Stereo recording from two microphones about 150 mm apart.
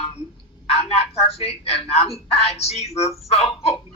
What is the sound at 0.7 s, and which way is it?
A man's voice, 45° left (ahead or behind).